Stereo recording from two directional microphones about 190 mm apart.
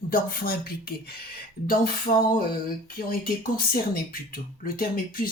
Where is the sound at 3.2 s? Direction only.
50° left (ahead or behind).